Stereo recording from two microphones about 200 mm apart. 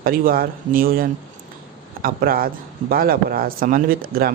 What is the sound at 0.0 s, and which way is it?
Speech, 45° right (ahead or behind).